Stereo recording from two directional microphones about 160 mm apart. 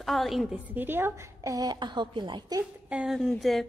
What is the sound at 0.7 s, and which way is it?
A woman's voice, 10° right (ahead or behind).